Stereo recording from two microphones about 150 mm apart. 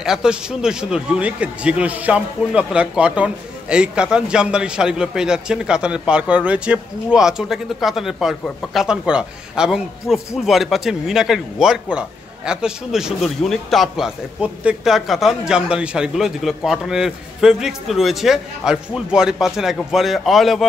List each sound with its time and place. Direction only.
0.0 s a man's voice: 5° right (ahead or behind)